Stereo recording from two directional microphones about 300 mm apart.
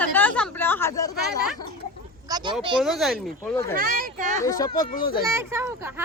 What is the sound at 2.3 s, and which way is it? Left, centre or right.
Speech, centre.